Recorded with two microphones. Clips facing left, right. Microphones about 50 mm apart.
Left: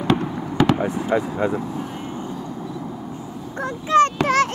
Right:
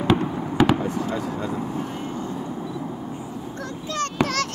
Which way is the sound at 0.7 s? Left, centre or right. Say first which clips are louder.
Left 4 dB; left.